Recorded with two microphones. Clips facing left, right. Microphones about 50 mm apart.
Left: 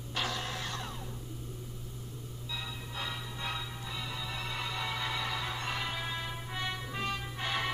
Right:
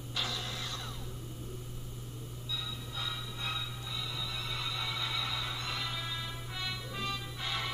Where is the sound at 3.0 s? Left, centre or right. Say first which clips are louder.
Left 1 dB; left.